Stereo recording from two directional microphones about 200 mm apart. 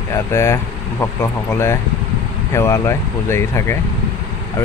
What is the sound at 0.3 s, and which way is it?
Speech, 15° left (ahead or behind).